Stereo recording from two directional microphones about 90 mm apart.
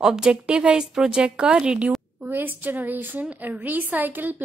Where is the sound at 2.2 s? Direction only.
20° right (ahead or behind).